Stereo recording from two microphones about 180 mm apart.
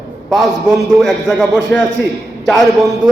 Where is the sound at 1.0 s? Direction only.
Centre (ahead or behind).